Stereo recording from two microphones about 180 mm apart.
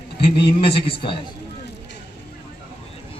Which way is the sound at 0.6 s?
30° left (ahead or behind).